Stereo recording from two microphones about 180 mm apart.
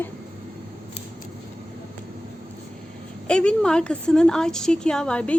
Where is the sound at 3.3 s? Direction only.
5° left (ahead or behind).